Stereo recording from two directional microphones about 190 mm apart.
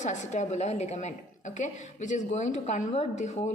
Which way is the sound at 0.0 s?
40° left (ahead or behind).